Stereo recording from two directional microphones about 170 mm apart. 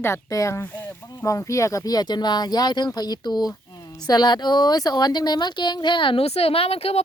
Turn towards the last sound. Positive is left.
turn(degrees=35)  # may be behind; listen again after turning